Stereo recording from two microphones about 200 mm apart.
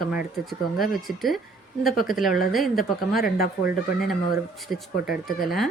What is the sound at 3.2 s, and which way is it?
Speech, 50° left (ahead or behind).